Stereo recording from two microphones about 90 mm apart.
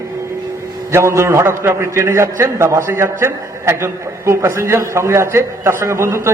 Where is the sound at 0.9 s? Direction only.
30° right (ahead or behind).